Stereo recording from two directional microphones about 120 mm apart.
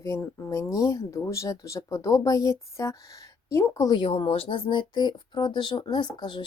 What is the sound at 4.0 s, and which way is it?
Speech, 50° left (ahead or behind).